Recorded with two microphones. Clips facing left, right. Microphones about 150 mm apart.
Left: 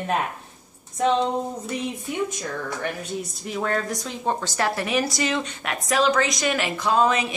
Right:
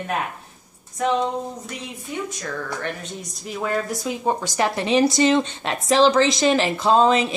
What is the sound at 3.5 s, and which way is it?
A woman's voice, 5° right (ahead or behind).